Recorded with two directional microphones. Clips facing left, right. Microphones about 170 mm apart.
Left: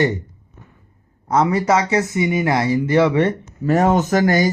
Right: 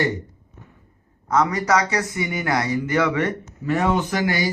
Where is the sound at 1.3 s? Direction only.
25° left (ahead or behind).